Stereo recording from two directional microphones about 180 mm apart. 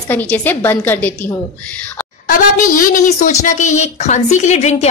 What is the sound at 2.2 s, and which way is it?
A woman's voice, 50° left (ahead or behind).